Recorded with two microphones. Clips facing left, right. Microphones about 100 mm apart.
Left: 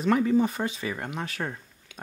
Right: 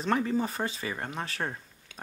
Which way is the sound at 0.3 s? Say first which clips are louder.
Left 6 dB; 35° right (ahead or behind).